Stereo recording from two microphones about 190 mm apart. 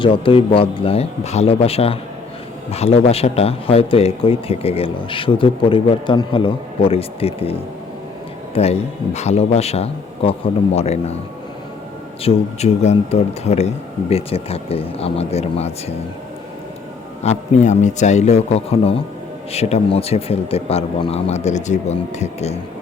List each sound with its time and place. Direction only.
0.0 s a man's voice: 25° left (ahead or behind)
8.5 s speech: 35° left (ahead or behind)
12.2 s speech: 35° left (ahead or behind)
17.2 s speech: 40° left (ahead or behind)